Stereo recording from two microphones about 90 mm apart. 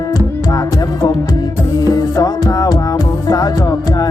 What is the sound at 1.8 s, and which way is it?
Music, 45° left (ahead or behind).